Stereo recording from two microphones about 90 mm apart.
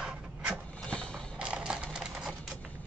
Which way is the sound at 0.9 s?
10° left (ahead or behind).